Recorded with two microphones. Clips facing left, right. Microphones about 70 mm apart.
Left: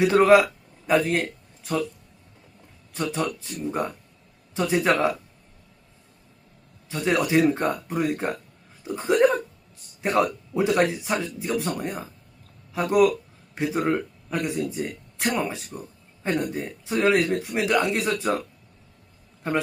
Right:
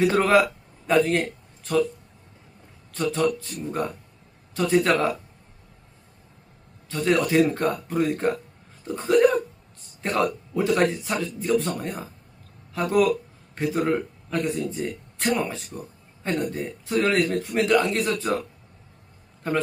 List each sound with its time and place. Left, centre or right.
0.0 s speech: centre
2.9 s speech: centre
6.8 s speech: centre
10.0 s speech: centre
11.3 s speech: centre
19.4 s speech: centre